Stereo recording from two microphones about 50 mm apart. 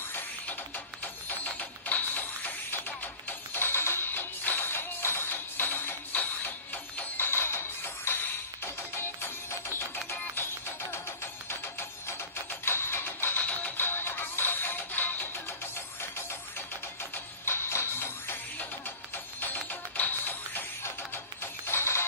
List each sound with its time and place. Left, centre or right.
0.1 s music: left
1.6 s printer: left
2.9 s music: left
13.4 s music: left
13.7 s music: left
15.4 s music: left
18.6 s music: left
20.8 s music: left